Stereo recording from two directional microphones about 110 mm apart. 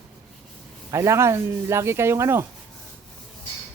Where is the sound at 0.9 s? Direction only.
25° right (ahead or behind).